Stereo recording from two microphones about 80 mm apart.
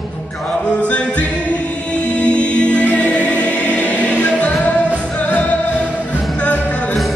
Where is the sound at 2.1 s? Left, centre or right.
Centre.